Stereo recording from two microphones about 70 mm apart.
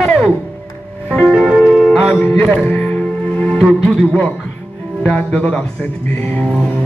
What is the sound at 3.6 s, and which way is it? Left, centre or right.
Music, centre.